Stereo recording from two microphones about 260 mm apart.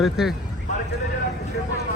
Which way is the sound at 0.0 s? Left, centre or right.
Centre.